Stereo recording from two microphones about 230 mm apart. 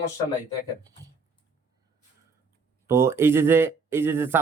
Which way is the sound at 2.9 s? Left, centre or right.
Centre.